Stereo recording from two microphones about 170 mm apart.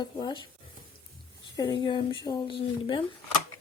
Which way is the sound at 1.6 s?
25° left (ahead or behind).